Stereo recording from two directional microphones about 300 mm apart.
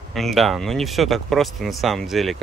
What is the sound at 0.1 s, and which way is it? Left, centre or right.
Speech, centre.